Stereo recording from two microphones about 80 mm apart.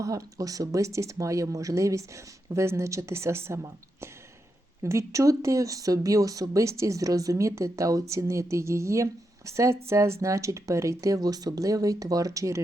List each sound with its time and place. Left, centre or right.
0.0 s speech: right
4.8 s speech: right